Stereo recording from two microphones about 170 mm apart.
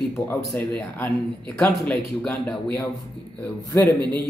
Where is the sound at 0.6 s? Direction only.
10° left (ahead or behind).